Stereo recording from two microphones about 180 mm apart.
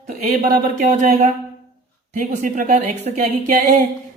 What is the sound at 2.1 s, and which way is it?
Speech, 45° right (ahead or behind).